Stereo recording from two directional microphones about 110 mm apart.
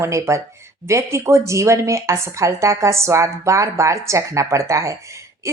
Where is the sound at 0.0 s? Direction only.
25° right (ahead or behind).